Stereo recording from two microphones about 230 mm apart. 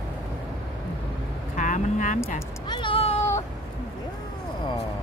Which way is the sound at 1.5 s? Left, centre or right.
Left.